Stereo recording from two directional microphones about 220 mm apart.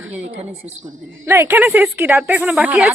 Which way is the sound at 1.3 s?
10° right (ahead or behind).